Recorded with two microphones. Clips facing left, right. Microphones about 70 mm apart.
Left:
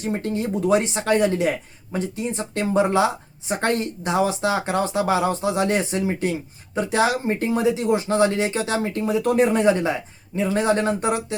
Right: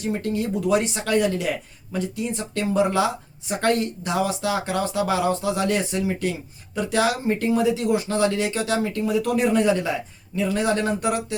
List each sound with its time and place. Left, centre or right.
0.0 s speech: left